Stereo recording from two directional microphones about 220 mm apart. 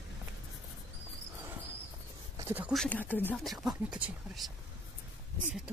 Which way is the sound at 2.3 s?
10° right (ahead or behind).